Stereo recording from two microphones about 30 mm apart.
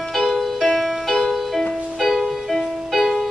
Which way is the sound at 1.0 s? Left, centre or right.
Centre.